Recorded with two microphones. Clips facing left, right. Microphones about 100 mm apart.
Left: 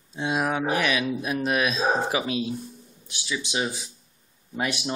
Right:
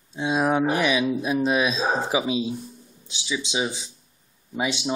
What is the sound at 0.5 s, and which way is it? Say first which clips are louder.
Speech: right 3 dB; 35° right (ahead or behind).